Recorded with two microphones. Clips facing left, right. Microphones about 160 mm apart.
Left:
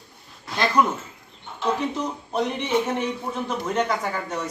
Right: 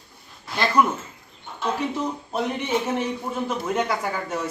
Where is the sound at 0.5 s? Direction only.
5° right (ahead or behind).